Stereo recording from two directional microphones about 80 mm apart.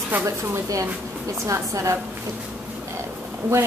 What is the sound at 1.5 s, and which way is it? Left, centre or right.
Speech, right.